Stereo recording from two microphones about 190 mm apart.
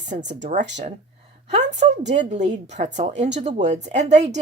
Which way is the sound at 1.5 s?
35° right (ahead or behind).